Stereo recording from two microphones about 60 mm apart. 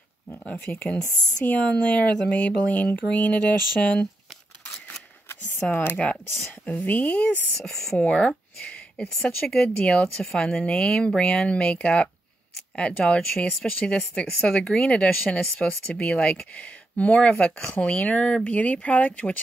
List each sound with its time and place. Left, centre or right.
0.3 s speech: left
5.6 s speech: left